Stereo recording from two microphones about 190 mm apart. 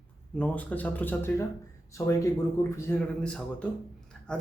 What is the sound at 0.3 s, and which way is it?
Speech, 5° left (ahead or behind).